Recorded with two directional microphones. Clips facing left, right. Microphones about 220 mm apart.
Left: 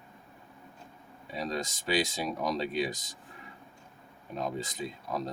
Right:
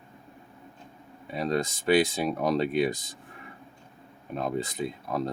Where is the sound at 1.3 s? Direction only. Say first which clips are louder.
Right 6 dB; 55° right (ahead or behind).